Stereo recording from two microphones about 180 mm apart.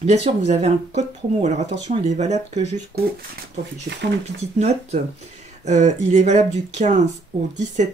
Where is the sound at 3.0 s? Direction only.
60° right (ahead or behind).